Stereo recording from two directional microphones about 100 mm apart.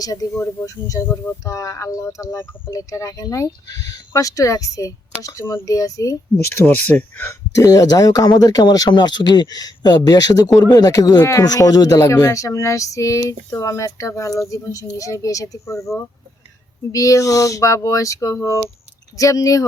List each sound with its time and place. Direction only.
0.0 s speech: 35° left (ahead or behind)
6.3 s speech: 20° left (ahead or behind)
7.3 s speech: 35° left (ahead or behind)
16.9 s speech: 35° left (ahead or behind)